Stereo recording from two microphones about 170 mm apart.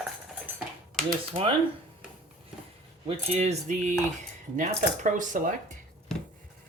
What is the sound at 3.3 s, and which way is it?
Speech, 40° right (ahead or behind).